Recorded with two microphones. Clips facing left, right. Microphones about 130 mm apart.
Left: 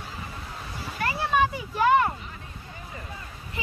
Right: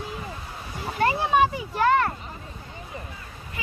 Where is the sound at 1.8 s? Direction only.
10° left (ahead or behind).